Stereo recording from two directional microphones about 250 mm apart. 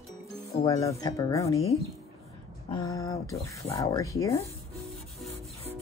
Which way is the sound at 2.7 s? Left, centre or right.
Centre.